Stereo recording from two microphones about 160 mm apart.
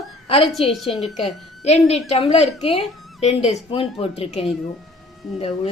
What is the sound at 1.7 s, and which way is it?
A woman's voice, 40° left (ahead or behind).